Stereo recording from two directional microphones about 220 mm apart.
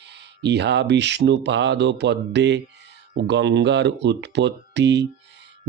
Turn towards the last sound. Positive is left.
turn(degrees=-50)  # may be behind; listen again after turning